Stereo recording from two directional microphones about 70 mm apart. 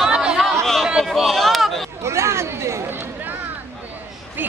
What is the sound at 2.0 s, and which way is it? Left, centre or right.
Speech, right.